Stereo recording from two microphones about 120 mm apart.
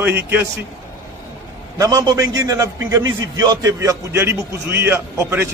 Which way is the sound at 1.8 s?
30° right (ahead or behind).